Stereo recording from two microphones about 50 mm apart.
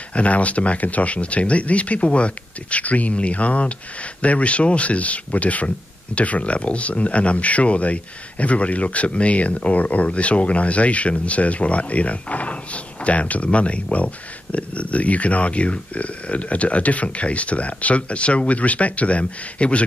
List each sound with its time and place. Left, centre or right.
0.1 s speech: left